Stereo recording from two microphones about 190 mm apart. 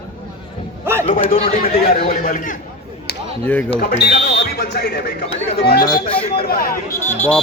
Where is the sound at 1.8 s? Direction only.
50° left (ahead or behind).